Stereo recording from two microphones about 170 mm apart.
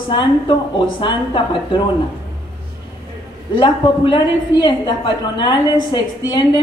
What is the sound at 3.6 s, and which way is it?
A man's voice, 30° left (ahead or behind).